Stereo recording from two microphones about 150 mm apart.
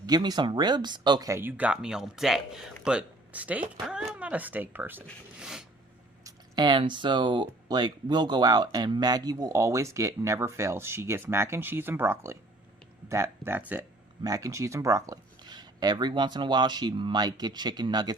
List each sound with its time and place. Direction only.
0.0 s speech: 25° right (ahead or behind)
5.4 s a sound: 5° right (ahead or behind)
6.2 s speech: 30° right (ahead or behind)